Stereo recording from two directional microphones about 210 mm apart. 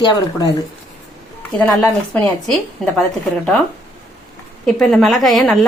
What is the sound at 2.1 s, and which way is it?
Speech, 5° left (ahead or behind).